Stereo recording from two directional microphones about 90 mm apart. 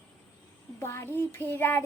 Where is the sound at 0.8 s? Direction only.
30° left (ahead or behind).